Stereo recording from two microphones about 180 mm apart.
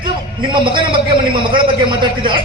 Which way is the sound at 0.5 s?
25° right (ahead or behind).